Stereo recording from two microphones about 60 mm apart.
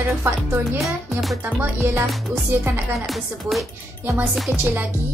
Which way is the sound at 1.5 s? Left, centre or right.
Right.